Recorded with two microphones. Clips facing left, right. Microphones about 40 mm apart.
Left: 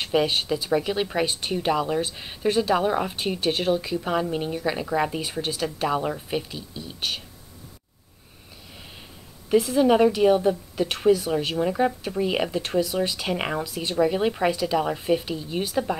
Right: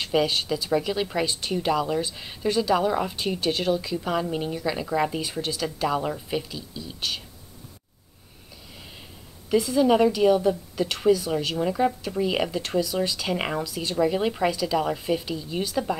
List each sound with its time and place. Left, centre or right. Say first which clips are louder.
0.0 s speech: left 1 dB; centre
9.5 s speech: left 1 dB; centre
13.4 s speech: even; centre